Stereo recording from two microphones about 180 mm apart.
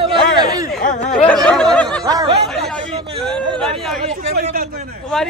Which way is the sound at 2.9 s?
30° right (ahead or behind).